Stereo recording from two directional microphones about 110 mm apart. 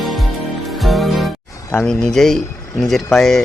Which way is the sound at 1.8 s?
5° left (ahead or behind).